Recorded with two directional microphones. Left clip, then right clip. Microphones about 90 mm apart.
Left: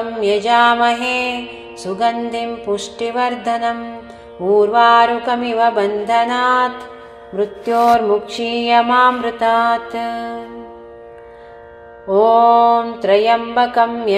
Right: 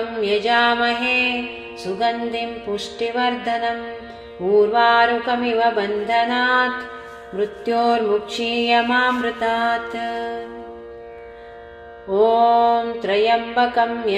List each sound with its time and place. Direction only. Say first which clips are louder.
0.1 s mantra: left 4 dB; 50° left (ahead or behind)
1.9 s mantra: left 3 dB; 40° left (ahead or behind)
2.6 s music: left 4 dB; 55° left (ahead or behind)
7.3 s mantra: left 4 dB; 30° left (ahead or behind)
12.1 s mantra: left 5 dB; 45° left (ahead or behind)